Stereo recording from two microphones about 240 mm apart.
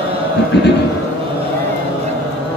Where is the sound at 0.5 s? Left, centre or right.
Left.